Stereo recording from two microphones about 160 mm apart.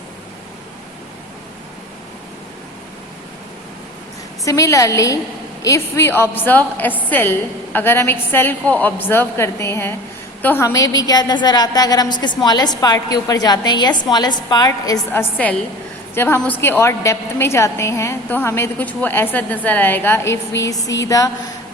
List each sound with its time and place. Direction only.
4.4 s a woman's voice: 20° left (ahead or behind)